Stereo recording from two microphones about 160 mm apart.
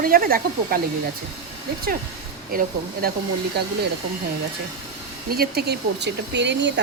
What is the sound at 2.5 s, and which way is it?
Speech, 65° right (ahead or behind).